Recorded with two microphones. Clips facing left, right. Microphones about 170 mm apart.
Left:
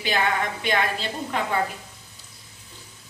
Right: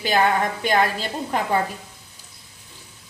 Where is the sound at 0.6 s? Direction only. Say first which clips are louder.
Right 4 dB; 45° right (ahead or behind).